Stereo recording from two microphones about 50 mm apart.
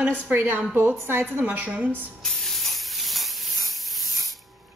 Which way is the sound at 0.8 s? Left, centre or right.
Right.